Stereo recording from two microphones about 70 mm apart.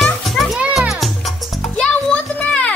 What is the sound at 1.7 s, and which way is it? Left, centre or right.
Music, centre.